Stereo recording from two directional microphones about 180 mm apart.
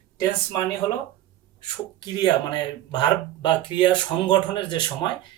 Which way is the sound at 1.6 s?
25° left (ahead or behind).